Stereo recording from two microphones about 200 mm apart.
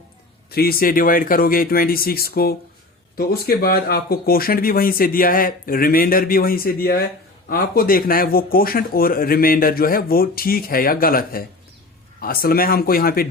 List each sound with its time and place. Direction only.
0.5 s speech: 50° left (ahead or behind)